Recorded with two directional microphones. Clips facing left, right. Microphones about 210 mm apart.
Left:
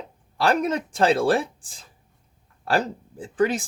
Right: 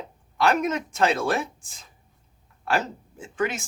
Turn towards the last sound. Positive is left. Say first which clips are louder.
# left 5 dB
turn(degrees=35)  # may be behind; listen again after turning